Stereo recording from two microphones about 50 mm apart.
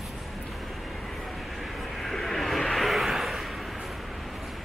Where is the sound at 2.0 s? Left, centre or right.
Centre.